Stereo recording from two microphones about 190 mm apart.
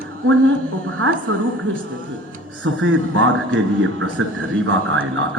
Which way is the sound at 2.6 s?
90° right.